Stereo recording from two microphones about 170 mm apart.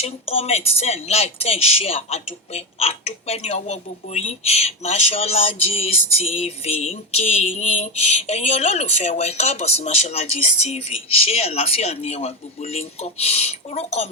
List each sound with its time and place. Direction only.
0.0 s speech: 35° left (ahead or behind)